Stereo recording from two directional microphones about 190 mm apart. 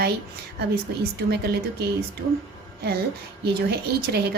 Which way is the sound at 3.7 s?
60° right (ahead or behind).